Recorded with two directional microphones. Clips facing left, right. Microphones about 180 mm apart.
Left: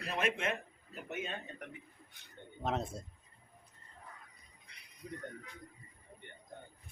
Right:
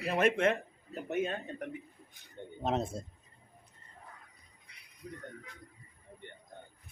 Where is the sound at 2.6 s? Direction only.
20° right (ahead or behind).